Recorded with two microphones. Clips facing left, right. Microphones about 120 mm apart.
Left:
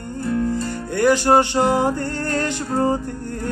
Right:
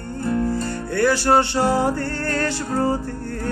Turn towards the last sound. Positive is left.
turn(degrees=20)  # may be behind; listen again after turning